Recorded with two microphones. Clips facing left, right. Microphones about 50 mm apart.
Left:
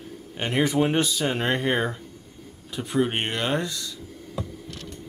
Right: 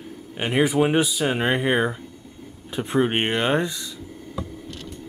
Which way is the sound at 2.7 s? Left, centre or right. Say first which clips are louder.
Right 3 dB; right.